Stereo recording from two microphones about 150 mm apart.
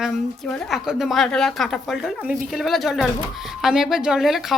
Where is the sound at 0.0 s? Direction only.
Centre (ahead or behind).